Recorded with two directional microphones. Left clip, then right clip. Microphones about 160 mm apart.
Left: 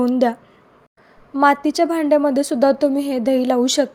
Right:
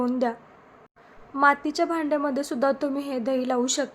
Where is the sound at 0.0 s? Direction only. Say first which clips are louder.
Left 8 dB; 45° left (ahead or behind).